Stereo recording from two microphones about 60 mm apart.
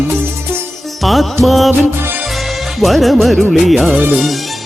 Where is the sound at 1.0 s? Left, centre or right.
Centre.